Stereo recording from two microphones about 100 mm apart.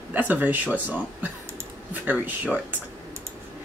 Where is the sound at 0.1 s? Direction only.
15° right (ahead or behind).